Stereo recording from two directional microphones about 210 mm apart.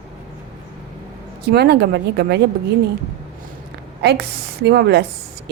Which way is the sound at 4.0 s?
50° right (ahead or behind).